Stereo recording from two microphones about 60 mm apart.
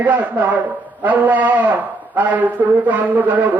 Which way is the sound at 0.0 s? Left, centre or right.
Right.